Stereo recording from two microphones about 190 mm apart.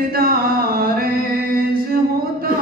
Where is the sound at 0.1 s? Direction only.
50° right (ahead or behind).